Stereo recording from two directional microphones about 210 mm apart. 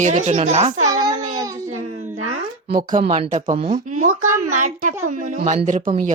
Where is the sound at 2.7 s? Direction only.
35° right (ahead or behind).